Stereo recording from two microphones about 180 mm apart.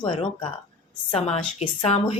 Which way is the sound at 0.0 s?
30° left (ahead or behind).